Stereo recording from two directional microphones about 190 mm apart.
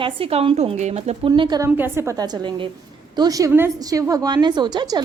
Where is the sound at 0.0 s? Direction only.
30° right (ahead or behind).